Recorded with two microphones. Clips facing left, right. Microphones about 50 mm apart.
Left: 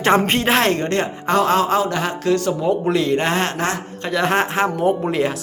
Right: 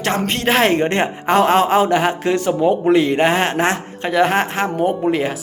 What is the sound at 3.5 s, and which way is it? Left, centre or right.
Speech, right.